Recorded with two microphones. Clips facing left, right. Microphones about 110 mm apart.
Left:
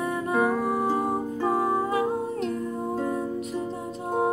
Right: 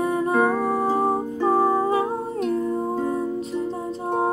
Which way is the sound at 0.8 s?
35° right (ahead or behind).